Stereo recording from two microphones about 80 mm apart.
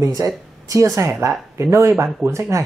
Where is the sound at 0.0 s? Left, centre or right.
Right.